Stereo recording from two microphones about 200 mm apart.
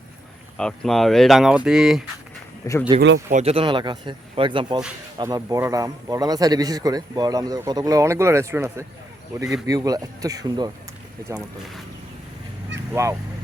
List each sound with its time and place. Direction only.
0.5 s speech: 5° left (ahead or behind)
2.9 s a man's voice: 25° right (ahead or behind)
11.3 s speech: 5° right (ahead or behind)
12.9 s speech: 15° right (ahead or behind)